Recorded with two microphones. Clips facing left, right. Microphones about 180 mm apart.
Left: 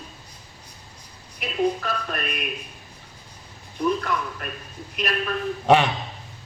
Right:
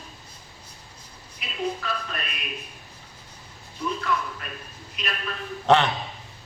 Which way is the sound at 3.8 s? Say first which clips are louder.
Left 3 dB; 55° left (ahead or behind).